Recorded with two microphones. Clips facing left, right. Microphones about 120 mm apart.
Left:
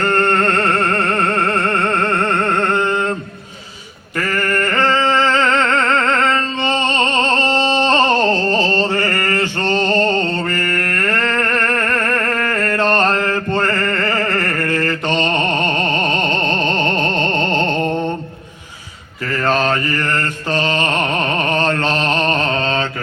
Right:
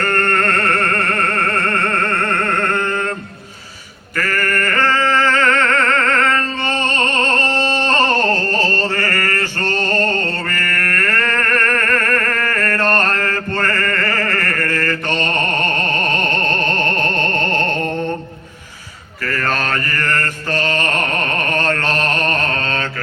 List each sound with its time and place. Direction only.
0.0 s music: 20° left (ahead or behind)
4.2 s singing: 20° left (ahead or behind)
6.7 s music: 50° right (ahead or behind)
6.9 s music: 20° left (ahead or behind)
7.4 s a sound: 20° left (ahead or behind)
8.3 s chant: 20° left (ahead or behind)
12.9 s music: 20° left (ahead or behind)
16.5 s music: 50° right (ahead or behind)
19.2 s mantra: 20° left (ahead or behind)